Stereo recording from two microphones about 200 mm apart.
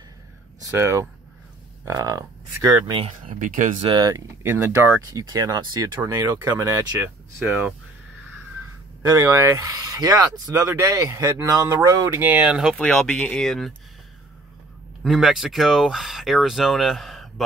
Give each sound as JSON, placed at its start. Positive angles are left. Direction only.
{"t": 0.6, "sound": "speech", "side_deg": -15}
{"t": 3.3, "sound": "speech", "side_deg": -40}
{"t": 3.9, "sound": "speech", "side_deg": -20}
{"t": 9.0, "sound": "speech", "side_deg": -15}
{"t": 15.0, "sound": "speech", "side_deg": 0}